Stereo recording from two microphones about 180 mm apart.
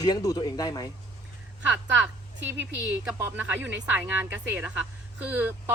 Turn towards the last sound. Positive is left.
turn(degrees=-10)  # may be behind; listen again after turning